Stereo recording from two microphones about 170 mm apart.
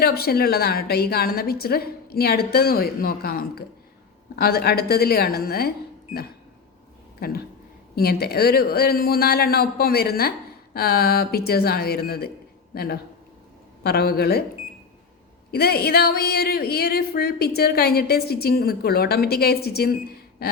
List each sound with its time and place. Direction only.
0.0 s speech: 65° left (ahead or behind)
7.2 s speech: 65° left (ahead or behind)
15.5 s speech: 65° left (ahead or behind)